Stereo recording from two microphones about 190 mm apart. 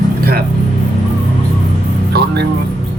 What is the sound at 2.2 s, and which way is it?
Speech, 55° right (ahead or behind).